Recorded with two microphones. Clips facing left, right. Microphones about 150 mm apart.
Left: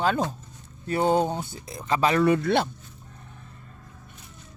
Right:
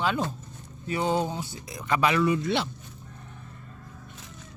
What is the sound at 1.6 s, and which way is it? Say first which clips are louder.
Speech: left 1 dB; 30° left (ahead or behind).